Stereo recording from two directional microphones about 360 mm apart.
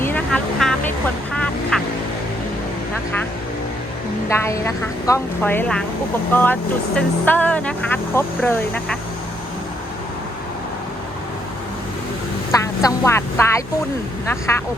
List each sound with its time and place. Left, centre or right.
0.0 s honk: centre
4.3 s speech: centre
12.5 s a sound: centre
14.5 s speech: centre